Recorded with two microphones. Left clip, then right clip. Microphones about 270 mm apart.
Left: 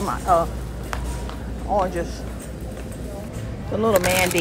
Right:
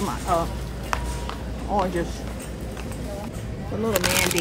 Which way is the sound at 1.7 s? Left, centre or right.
Right.